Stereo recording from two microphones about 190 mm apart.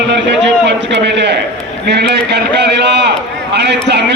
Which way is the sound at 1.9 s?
60° right (ahead or behind).